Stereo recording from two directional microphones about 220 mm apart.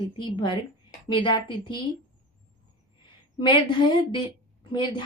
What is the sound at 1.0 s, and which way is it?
Speech, 20° left (ahead or behind).